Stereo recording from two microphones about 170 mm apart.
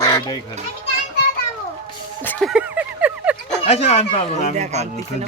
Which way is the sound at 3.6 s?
40° left (ahead or behind).